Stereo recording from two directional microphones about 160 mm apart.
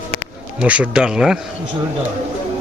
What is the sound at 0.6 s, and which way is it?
Speech, 10° right (ahead or behind).